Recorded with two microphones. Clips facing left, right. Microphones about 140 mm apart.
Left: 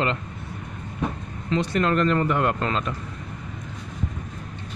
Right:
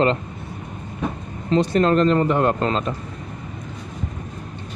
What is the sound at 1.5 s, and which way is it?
Speech, 30° right (ahead or behind).